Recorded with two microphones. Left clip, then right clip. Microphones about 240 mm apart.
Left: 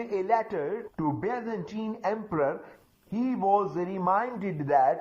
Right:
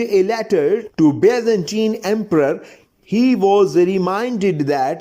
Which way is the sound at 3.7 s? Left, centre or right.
Right.